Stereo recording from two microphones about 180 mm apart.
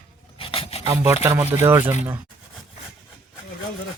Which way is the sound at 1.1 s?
15° right (ahead or behind).